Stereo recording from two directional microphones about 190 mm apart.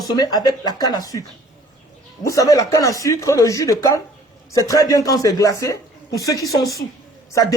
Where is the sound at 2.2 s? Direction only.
15° left (ahead or behind).